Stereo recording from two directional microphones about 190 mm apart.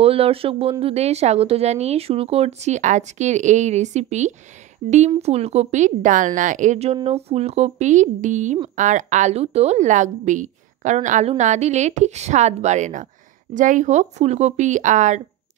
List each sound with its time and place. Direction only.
0.0 s a woman's voice: 30° right (ahead or behind)